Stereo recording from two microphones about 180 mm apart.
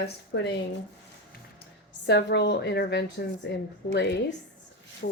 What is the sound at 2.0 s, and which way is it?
A woman's voice, 70° left (ahead or behind).